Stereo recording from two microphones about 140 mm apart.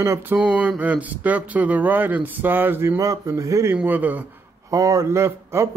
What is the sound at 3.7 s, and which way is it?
Speech, 10° right (ahead or behind).